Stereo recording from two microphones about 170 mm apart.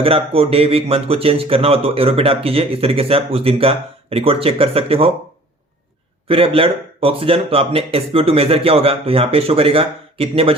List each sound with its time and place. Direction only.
0.0 s speech: 35° right (ahead or behind)
6.2 s speech: 35° right (ahead or behind)